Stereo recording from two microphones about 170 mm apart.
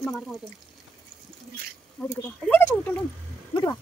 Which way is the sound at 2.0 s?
5° left (ahead or behind).